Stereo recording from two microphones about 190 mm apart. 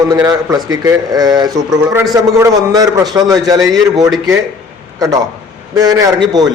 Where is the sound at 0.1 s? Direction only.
20° right (ahead or behind).